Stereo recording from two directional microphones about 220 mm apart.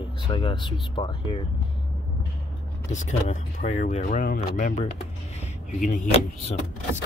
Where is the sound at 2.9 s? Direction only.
30° left (ahead or behind).